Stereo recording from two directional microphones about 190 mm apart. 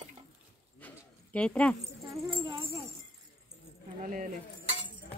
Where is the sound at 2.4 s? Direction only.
25° right (ahead or behind).